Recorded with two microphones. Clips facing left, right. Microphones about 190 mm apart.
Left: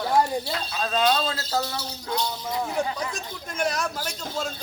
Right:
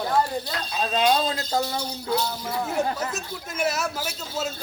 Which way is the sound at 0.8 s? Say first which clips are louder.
Right 2 dB; 15° right (ahead or behind).